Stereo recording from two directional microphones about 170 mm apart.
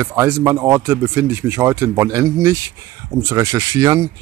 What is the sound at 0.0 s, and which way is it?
Speech, 15° right (ahead or behind).